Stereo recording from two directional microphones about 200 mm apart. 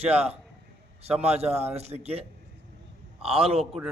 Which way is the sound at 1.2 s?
30° right (ahead or behind).